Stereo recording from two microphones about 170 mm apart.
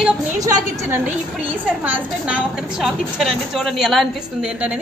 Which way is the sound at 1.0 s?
10° right (ahead or behind).